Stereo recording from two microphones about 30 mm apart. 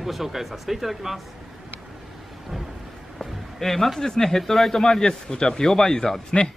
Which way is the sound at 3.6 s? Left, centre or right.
Centre.